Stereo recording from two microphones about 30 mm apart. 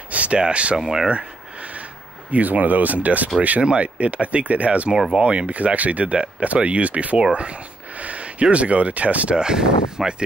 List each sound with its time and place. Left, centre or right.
0.1 s a sound: right
0.4 s speech: right
0.7 s speech: centre
1.0 s a sound: right
2.3 s speech: right
3.8 s speech: right
5.5 s speech: right
9.3 s speech: right